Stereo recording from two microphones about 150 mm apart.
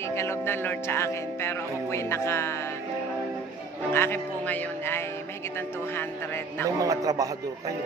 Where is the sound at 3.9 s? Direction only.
15° left (ahead or behind).